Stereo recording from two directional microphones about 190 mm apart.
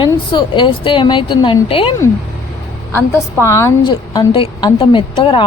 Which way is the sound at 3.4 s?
15° left (ahead or behind).